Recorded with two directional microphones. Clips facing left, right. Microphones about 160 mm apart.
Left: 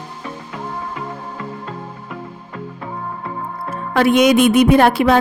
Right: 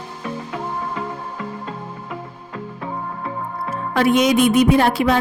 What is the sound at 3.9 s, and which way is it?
Music, 70° left (ahead or behind).